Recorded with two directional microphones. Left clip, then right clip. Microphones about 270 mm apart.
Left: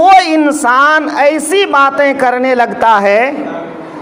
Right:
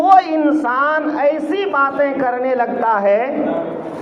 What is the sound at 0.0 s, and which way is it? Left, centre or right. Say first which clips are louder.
A man's voice: left 5 dB; left.